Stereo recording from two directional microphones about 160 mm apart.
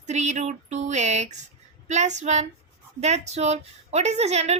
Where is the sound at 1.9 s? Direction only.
45° right (ahead or behind).